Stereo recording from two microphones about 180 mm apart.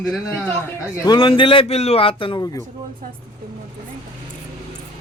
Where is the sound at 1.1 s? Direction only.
30° left (ahead or behind).